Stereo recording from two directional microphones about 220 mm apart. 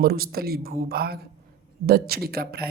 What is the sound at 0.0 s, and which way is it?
Speech, 45° right (ahead or behind).